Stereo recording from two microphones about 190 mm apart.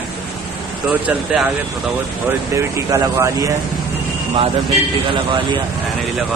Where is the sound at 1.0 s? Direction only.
5° right (ahead or behind).